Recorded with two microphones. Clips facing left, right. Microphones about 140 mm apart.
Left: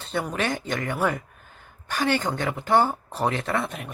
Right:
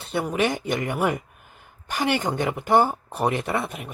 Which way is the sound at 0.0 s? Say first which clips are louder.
Right 3 dB; 10° right (ahead or behind).